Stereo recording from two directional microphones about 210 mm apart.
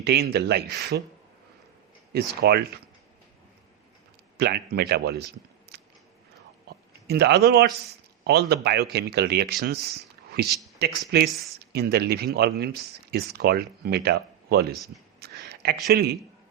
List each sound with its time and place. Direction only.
0.0 s speech: 50° right (ahead or behind)
2.1 s speech: 50° right (ahead or behind)
4.4 s a man's voice: 50° right (ahead or behind)
15.2 s a sound: 50° right (ahead or behind)
15.9 s speech: 50° right (ahead or behind)